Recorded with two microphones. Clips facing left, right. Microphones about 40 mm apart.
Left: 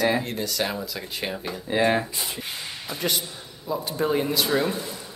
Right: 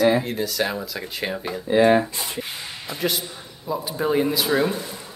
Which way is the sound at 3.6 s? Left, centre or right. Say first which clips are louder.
Right 1 dB; centre.